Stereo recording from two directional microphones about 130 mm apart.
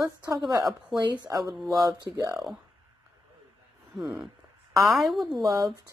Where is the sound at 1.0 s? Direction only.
30° right (ahead or behind).